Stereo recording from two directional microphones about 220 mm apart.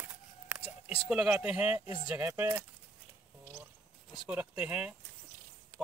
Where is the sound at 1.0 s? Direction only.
Centre (ahead or behind).